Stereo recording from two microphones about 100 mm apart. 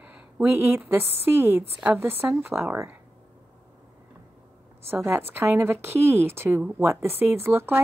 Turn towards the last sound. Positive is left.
turn(degrees=-20)  # may be behind; listen again after turning